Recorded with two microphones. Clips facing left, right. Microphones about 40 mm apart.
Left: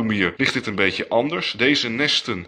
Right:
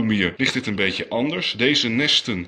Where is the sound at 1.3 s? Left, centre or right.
Centre.